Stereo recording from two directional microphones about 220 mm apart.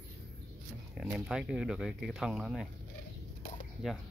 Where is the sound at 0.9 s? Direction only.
5° right (ahead or behind).